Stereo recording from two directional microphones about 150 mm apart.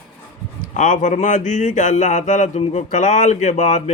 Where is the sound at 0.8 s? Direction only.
55° left (ahead or behind).